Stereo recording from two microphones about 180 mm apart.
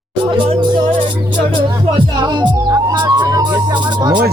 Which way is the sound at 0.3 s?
30° right (ahead or behind).